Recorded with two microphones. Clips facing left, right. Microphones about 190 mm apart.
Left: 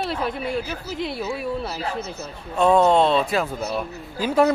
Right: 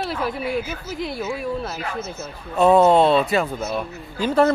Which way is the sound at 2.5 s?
5° right (ahead or behind).